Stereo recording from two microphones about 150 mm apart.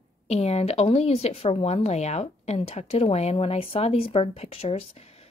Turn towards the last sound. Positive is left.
turn(degrees=45)  # may be behind; listen again after turning